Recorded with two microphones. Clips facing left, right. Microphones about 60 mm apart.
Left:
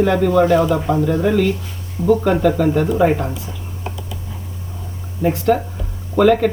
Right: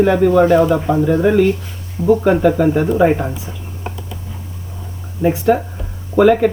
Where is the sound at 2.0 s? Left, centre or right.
Right.